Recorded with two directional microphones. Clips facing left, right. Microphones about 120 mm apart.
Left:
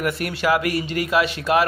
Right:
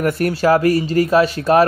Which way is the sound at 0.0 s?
40° right (ahead or behind).